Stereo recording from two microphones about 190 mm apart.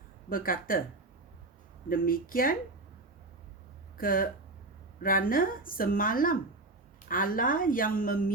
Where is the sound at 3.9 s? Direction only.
50° left (ahead or behind).